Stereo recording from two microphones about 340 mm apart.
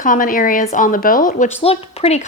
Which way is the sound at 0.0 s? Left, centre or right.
Left.